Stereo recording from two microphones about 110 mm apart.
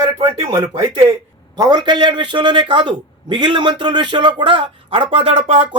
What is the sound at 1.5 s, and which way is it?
A man's voice, 40° right (ahead or behind).